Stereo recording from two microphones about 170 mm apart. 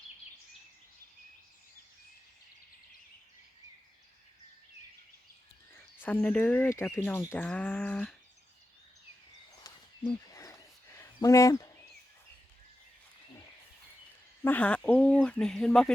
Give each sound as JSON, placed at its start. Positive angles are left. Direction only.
{"t": 6.0, "sound": "speech", "side_deg": 10}
{"t": 9.7, "sound": "a sound", "side_deg": 20}
{"t": 14.4, "sound": "speech", "side_deg": 10}